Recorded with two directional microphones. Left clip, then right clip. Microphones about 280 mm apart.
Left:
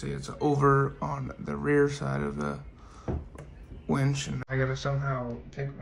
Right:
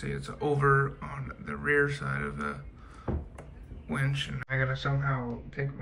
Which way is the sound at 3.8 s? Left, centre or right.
Centre.